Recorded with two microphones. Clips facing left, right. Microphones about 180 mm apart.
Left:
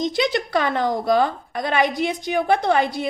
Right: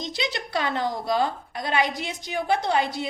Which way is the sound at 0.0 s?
55° left (ahead or behind).